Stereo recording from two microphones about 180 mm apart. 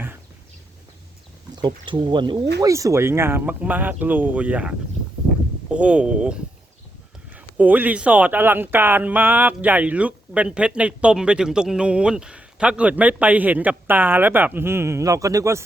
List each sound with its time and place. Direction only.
1.5 s speech: 25° right (ahead or behind)